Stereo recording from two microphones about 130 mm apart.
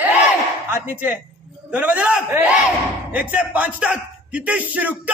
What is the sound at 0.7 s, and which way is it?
A man's voice, 15° right (ahead or behind).